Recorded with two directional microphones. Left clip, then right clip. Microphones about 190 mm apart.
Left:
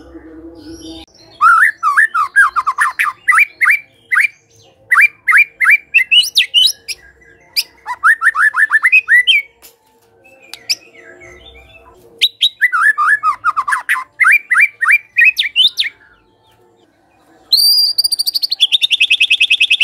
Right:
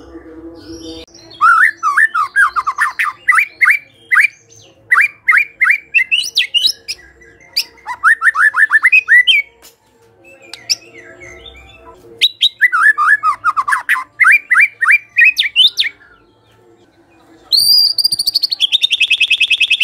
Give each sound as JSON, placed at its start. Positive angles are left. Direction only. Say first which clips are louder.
{"t": 1.4, "sound": "whistling", "louder": "even", "side_deg": 15}
{"t": 2.4, "sound": "bird", "louder": "left 1 dB", "side_deg": 15}
{"t": 4.9, "sound": "bird", "louder": "left 2 dB", "side_deg": 20}
{"t": 7.5, "sound": "bird", "louder": "even", "side_deg": 10}
{"t": 10.5, "sound": "bird", "louder": "even", "side_deg": 15}
{"t": 12.2, "sound": "bird", "louder": "right 1 dB", "side_deg": 0}
{"t": 17.9, "sound": "bird", "louder": "right 1 dB", "side_deg": 10}